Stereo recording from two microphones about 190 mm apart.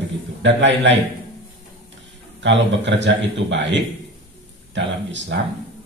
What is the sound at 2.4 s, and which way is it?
A man's voice, 70° right (ahead or behind).